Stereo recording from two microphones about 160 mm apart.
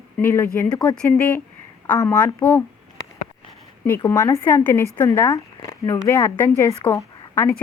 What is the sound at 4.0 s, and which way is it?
A woman's voice, 20° left (ahead or behind).